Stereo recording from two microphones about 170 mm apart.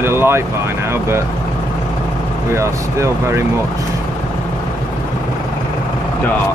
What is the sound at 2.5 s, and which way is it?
Speech, 15° right (ahead or behind).